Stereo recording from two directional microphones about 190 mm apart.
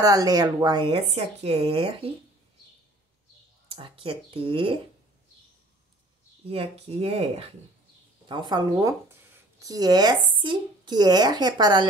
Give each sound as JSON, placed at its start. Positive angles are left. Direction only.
{"t": 0.0, "sound": "speech", "side_deg": -20}
{"t": 3.7, "sound": "speech", "side_deg": -30}
{"t": 6.4, "sound": "speech", "side_deg": -30}